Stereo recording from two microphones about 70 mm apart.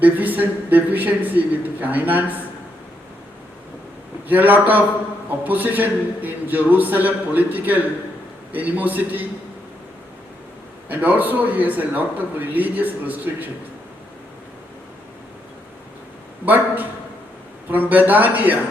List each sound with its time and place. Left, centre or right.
0.0 s a man's voice: right
4.3 s a man's voice: right
10.8 s a man's voice: right
17.7 s a man's voice: right